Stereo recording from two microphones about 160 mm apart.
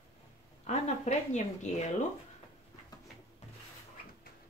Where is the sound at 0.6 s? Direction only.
45° left (ahead or behind).